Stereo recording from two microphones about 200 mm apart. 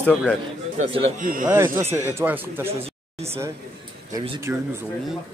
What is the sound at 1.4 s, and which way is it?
A man's voice, 10° right (ahead or behind).